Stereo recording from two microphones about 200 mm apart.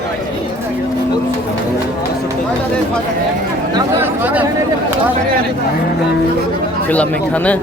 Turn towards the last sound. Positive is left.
turn(degrees=5)  # may be behind; listen again after turning